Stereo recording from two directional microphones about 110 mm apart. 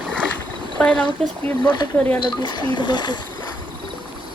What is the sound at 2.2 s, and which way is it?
Speech, 45° left (ahead or behind).